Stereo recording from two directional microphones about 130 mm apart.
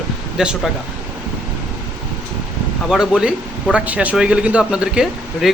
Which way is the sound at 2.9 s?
5° right (ahead or behind).